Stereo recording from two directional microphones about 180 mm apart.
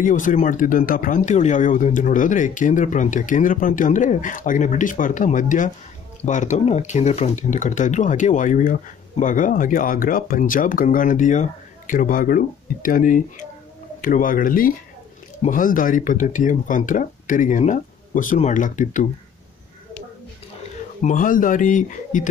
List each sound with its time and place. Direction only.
0.0 s speech: 45° left (ahead or behind)
21.0 s speech: 45° left (ahead or behind)